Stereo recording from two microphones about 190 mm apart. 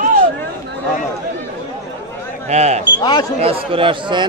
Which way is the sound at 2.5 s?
35° right (ahead or behind).